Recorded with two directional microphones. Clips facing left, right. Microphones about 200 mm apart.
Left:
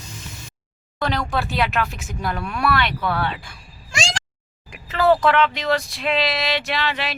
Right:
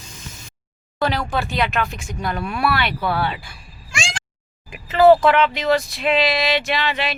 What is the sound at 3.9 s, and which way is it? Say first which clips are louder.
Meow: left 3 dB; 40° left (ahead or behind).